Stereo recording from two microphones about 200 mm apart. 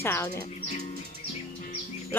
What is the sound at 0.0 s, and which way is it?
Speech, 10° left (ahead or behind).